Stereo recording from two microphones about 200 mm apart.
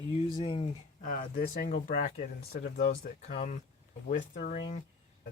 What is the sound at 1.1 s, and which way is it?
Speech, 45° left (ahead or behind).